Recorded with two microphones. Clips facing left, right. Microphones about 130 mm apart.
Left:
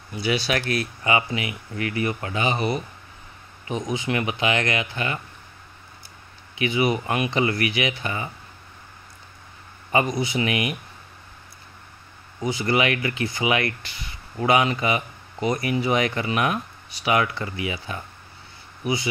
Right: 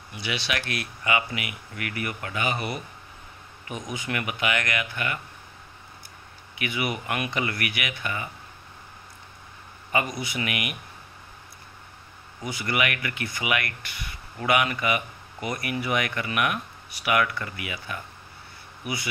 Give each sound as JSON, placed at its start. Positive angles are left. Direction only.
{"t": 0.1, "sound": "speech", "side_deg": 40}
{"t": 6.6, "sound": "speech", "side_deg": 25}
{"t": 9.9, "sound": "speech", "side_deg": 30}
{"t": 12.4, "sound": "speech", "side_deg": 30}